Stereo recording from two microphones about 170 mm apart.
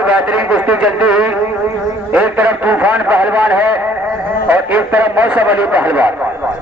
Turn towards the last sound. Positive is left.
turn(degrees=-10)  # may be behind; listen again after turning